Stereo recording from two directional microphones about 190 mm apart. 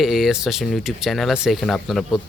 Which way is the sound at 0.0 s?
Centre (ahead or behind).